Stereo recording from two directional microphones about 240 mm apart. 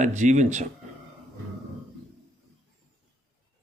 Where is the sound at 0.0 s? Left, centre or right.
Right.